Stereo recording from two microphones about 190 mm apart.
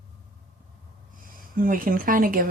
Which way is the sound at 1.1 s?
45° right (ahead or behind).